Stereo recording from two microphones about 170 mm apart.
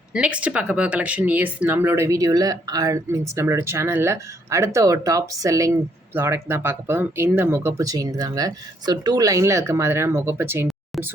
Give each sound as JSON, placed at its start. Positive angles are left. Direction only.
{"t": 0.1, "sound": "speech", "side_deg": -5}